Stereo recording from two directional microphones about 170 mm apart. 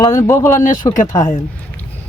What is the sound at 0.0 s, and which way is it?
Speech, 15° left (ahead or behind).